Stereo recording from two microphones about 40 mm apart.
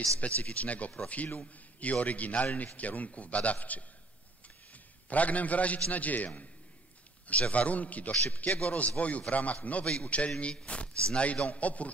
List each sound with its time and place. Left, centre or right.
0.2 s a man's voice: left
5.1 s a man's voice: left